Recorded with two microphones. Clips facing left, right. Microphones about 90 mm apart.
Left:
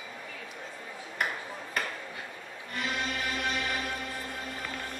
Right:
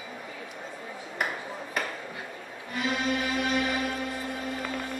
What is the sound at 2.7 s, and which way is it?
Music, 5° right (ahead or behind).